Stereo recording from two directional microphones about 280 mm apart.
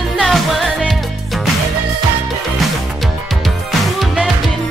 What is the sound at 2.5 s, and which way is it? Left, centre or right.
Music, centre.